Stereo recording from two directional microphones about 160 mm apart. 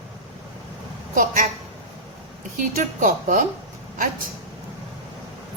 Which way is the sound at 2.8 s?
55° right (ahead or behind).